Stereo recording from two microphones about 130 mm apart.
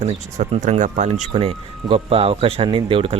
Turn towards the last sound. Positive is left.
turn(degrees=-45)  # may be behind; listen again after turning